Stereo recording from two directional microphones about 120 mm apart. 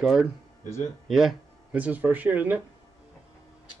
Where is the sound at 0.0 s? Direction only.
5° right (ahead or behind).